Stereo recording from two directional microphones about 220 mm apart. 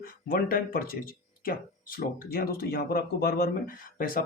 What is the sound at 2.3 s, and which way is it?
Speech, 45° left (ahead or behind).